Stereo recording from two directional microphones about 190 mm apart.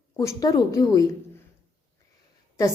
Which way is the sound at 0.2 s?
15° left (ahead or behind).